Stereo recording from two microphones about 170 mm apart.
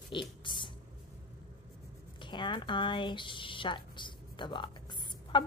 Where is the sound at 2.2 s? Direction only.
25° left (ahead or behind).